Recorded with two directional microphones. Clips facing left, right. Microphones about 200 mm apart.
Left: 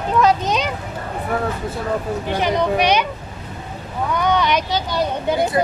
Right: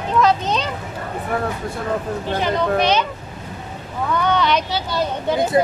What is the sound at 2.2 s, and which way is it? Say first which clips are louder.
Speech: left 1 dB; 15° left (ahead or behind).